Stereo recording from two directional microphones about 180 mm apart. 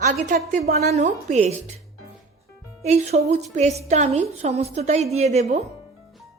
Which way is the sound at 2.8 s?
35° right (ahead or behind).